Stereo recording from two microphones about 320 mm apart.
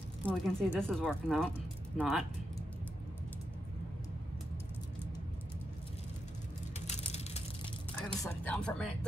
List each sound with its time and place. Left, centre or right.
0.2 s speech: centre
6.9 s a sound: centre
8.2 s speech: centre